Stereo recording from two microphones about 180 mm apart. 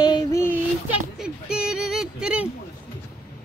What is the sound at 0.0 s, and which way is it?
Child singing, 20° left (ahead or behind).